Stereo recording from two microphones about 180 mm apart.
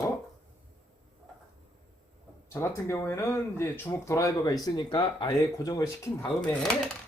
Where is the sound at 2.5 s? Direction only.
15° left (ahead or behind).